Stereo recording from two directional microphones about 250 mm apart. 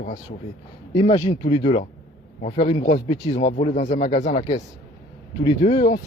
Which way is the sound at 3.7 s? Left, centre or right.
Left.